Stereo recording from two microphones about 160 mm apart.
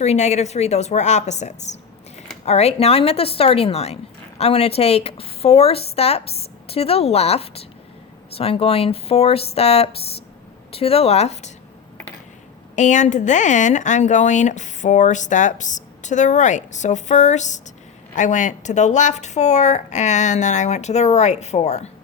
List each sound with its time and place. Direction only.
0.0 s a woman's voice: 45° left (ahead or behind)
12.7 s speech: 50° left (ahead or behind)